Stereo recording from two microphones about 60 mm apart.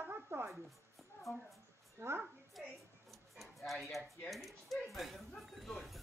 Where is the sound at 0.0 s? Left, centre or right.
Right.